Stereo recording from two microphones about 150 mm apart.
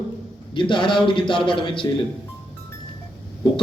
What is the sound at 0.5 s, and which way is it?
A man's voice, 35° left (ahead or behind).